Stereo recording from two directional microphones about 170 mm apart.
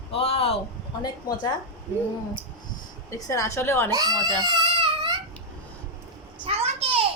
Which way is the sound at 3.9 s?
25° right (ahead or behind).